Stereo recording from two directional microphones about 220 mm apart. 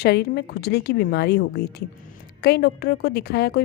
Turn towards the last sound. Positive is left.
turn(degrees=45)  # may be behind; listen again after turning